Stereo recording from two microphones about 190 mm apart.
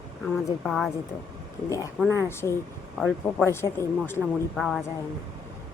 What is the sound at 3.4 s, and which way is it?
Speech, 15° left (ahead or behind).